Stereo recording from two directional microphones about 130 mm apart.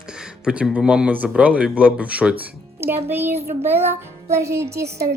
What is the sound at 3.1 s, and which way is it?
A woman's voice, 15° right (ahead or behind).